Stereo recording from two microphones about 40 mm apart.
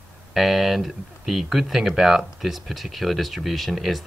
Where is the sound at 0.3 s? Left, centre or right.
Centre.